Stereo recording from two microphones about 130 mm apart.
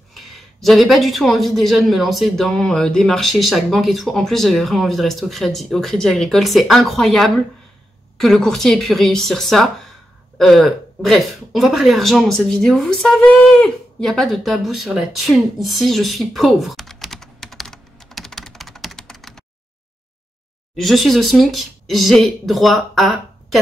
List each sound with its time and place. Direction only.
0.1 s speech: centre (ahead or behind)
20.7 s speech: centre (ahead or behind)